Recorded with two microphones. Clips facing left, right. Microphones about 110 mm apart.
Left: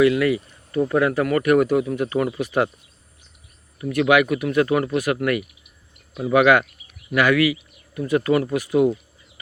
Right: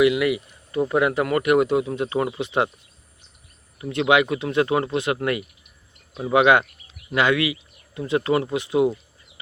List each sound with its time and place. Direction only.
0.0 s speech: 15° right (ahead or behind)
3.8 s speech: 25° right (ahead or behind)